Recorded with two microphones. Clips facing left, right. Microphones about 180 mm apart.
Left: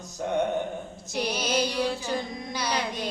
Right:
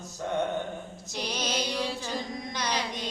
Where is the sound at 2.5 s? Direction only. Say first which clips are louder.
Left 3 dB; 10° left (ahead or behind).